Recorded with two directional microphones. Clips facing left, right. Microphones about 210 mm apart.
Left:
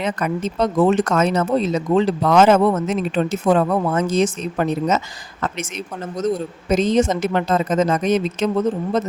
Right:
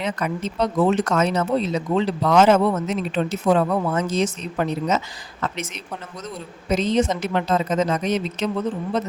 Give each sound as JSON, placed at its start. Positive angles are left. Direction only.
{"t": 0.0, "sound": "speech", "side_deg": 50}
{"t": 6.1, "sound": "speech", "side_deg": 45}